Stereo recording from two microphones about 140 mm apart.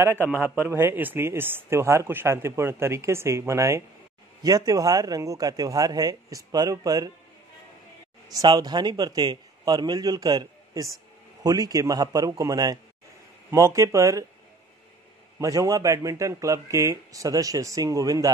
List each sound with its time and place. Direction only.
0.0 s speech: 15° right (ahead or behind)
8.3 s speech: 25° right (ahead or behind)
15.4 s speech: 25° right (ahead or behind)